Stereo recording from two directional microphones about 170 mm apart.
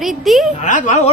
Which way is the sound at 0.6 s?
45° left (ahead or behind).